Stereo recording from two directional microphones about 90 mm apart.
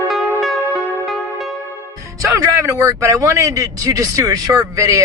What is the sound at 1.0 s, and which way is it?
Music, centre (ahead or behind).